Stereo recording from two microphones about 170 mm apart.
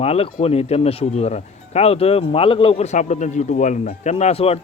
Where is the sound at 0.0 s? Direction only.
35° left (ahead or behind).